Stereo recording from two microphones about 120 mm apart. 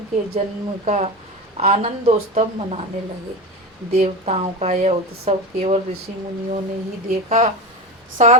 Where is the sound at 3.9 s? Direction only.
65° right (ahead or behind).